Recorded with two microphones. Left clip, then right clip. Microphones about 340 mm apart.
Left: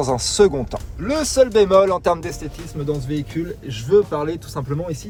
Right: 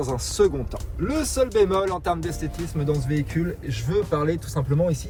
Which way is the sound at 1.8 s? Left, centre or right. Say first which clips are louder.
Left 8 dB; left.